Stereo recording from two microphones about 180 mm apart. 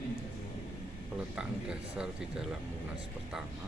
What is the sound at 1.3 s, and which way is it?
Speech, 5° right (ahead or behind).